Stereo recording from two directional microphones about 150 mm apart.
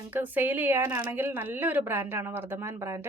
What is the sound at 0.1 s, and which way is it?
A woman's voice, 10° right (ahead or behind).